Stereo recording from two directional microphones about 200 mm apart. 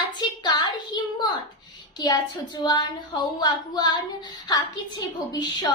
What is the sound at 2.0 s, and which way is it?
A woman's voice, 20° left (ahead or behind).